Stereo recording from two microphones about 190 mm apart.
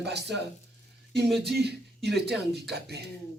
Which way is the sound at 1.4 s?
60° right (ahead or behind).